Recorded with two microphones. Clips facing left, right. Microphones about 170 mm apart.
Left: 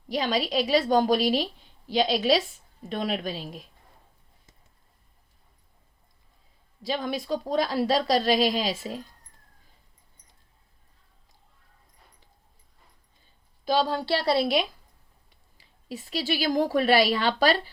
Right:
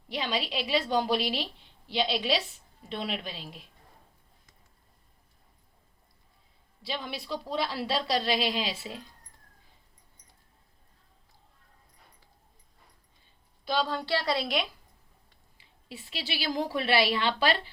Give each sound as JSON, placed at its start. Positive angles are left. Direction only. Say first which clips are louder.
{"t": 0.1, "sound": "a woman's voice", "louder": "left 6 dB", "side_deg": 40}
{"t": 6.8, "sound": "a woman's voice", "louder": "left 7 dB", "side_deg": 45}
{"t": 13.7, "sound": "a woman's voice", "louder": "left 5 dB", "side_deg": 40}
{"t": 15.5, "sound": "a woman's voice", "louder": "left 7 dB", "side_deg": 45}